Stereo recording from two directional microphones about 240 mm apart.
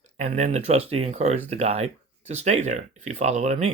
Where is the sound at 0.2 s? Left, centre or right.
Right.